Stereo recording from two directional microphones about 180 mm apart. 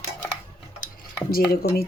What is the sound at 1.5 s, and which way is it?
Speech, 60° left (ahead or behind).